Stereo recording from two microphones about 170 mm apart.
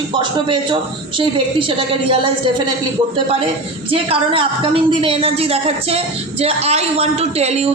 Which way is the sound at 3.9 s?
30° right (ahead or behind).